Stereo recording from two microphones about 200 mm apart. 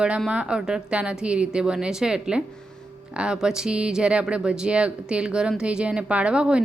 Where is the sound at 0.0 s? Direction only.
5° right (ahead or behind).